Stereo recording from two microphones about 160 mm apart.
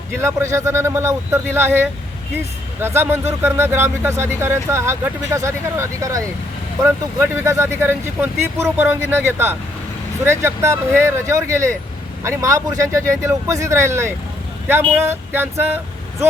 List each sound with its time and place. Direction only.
0.2 s speech: 15° right (ahead or behind)